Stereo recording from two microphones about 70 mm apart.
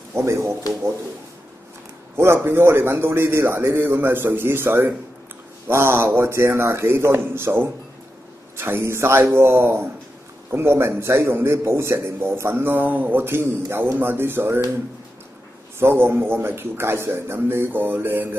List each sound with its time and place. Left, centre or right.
0.1 s speech: right
2.1 s a man's voice: right
15.8 s a man's voice: right